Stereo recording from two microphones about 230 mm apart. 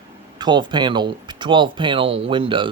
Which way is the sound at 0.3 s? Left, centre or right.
Centre.